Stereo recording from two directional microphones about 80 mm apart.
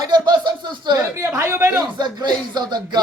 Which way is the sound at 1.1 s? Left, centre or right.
Right.